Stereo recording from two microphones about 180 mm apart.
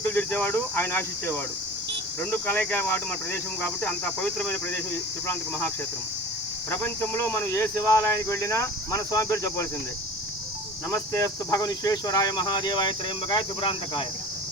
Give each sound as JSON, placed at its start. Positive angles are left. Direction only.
{"t": 0.0, "sound": "speech", "side_deg": 10}
{"t": 10.9, "sound": "speech", "side_deg": 15}